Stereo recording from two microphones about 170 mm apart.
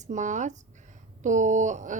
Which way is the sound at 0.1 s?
45° right (ahead or behind).